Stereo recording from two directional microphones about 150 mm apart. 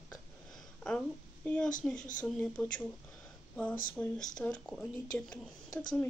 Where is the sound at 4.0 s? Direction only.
5° left (ahead or behind).